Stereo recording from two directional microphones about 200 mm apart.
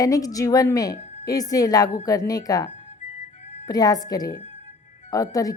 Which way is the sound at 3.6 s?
20° left (ahead or behind).